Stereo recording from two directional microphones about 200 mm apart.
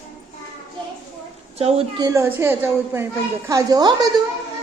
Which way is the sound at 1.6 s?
30° right (ahead or behind).